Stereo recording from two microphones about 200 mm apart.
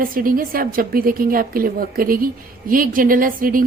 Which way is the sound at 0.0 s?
45° right (ahead or behind).